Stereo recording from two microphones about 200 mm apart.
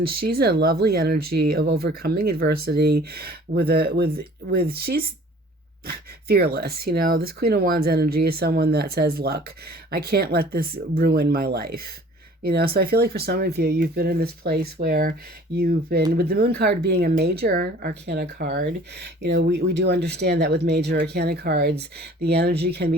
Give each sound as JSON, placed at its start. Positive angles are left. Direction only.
{"t": 0.3, "sound": "speech", "side_deg": -50}